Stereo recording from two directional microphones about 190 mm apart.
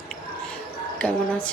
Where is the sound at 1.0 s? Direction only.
5° left (ahead or behind).